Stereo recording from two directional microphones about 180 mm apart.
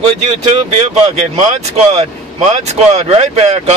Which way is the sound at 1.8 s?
35° right (ahead or behind).